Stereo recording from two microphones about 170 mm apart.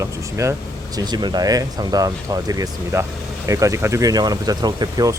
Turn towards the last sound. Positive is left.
turn(degrees=-25)  # may be behind; listen again after turning